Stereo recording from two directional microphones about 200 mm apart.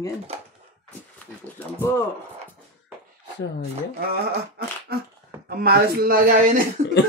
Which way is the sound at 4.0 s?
50° right (ahead or behind).